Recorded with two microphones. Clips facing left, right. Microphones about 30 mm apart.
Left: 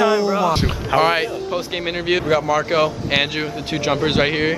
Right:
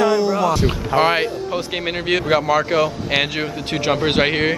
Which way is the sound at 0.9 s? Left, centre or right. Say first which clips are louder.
Left 1 dB; centre.